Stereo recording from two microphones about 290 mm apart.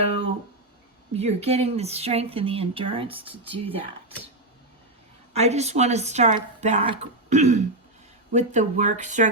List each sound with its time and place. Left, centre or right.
0.0 s a sound: centre
1.1 s speech: right
5.3 s speech: right